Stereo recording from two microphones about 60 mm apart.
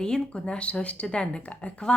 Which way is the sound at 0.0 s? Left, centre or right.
Centre.